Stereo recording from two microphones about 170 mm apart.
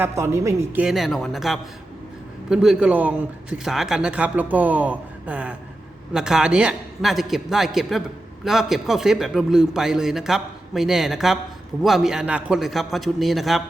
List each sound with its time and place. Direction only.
0.0 s speech: 15° right (ahead or behind)
0.9 s a man's voice: centre (ahead or behind)